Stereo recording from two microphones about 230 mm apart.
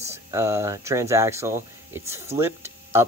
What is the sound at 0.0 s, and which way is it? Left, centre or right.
Speech, centre.